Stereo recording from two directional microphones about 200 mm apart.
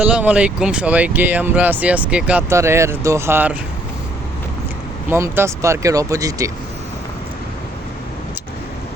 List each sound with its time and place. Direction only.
0.0 s speech: 5° right (ahead or behind)
5.1 s speech: 10° right (ahead or behind)